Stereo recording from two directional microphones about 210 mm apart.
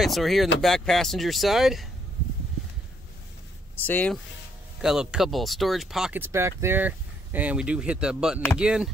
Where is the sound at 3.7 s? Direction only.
10° left (ahead or behind).